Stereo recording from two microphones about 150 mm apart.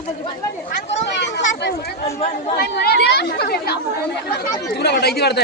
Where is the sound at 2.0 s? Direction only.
45° left (ahead or behind).